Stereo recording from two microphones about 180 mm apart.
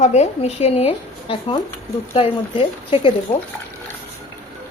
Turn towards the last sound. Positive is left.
turn(degrees=30)  # may be behind; listen again after turning